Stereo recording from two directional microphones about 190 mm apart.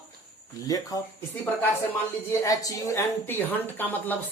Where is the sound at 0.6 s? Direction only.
20° left (ahead or behind).